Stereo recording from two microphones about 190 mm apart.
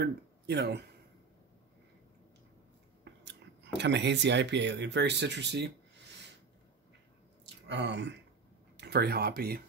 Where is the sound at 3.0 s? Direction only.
65° right (ahead or behind).